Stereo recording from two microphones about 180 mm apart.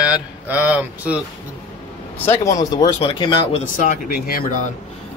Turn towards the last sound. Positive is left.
turn(degrees=50)  # may be behind; listen again after turning